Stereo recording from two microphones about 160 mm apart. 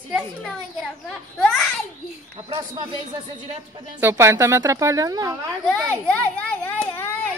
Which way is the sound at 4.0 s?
15° right (ahead or behind).